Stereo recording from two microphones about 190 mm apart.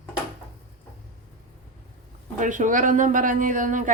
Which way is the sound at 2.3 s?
40° right (ahead or behind).